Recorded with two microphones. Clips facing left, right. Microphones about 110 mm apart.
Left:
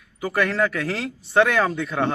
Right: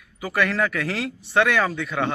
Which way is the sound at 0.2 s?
20° left (ahead or behind).